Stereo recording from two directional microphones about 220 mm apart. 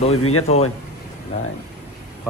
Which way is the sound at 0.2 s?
80° left.